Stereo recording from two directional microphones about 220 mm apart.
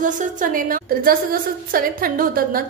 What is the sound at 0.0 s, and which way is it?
A woman's voice, 35° right (ahead or behind).